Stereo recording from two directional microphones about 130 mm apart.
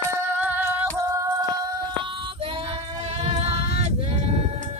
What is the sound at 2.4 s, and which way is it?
Female singing, 45° right (ahead or behind).